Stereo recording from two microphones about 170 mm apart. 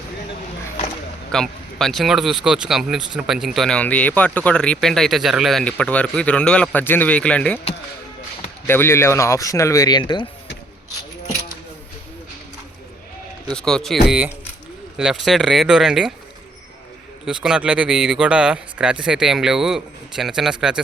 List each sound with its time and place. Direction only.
1.3 s speech: 5° left (ahead or behind)
8.6 s speech: 15° left (ahead or behind)
13.5 s speech: 5° left (ahead or behind)
17.2 s speech: 5° right (ahead or behind)